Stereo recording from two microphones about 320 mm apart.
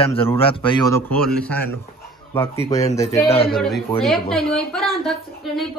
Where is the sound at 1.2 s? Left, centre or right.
Centre.